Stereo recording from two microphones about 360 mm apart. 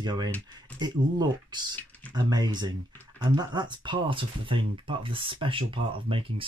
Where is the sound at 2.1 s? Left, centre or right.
Centre.